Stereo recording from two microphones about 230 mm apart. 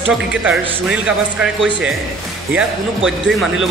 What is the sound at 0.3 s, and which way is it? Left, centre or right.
Speech, centre.